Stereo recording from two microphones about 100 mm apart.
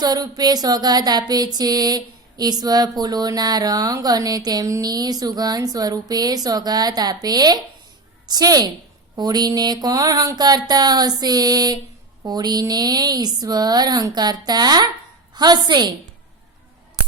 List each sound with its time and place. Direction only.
0.0 s speech: 40° right (ahead or behind)